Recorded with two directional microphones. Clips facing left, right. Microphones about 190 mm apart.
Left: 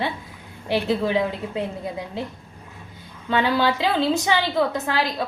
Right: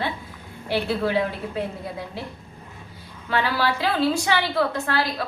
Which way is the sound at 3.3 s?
20° left (ahead or behind).